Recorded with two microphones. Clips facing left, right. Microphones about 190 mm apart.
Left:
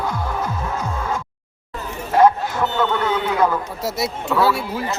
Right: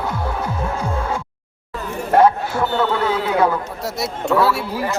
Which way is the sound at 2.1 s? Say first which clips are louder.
Right 1 dB; 60° right (ahead or behind).